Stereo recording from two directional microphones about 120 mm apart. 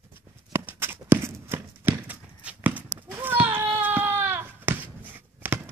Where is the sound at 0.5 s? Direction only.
20° right (ahead or behind).